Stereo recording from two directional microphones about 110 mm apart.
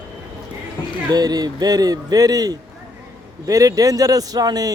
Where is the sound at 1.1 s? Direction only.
35° right (ahead or behind).